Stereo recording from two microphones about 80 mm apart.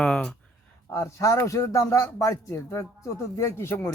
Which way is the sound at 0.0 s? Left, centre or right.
Centre.